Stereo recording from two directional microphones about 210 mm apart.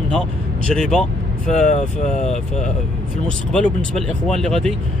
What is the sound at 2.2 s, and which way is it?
Speech, centre (ahead or behind).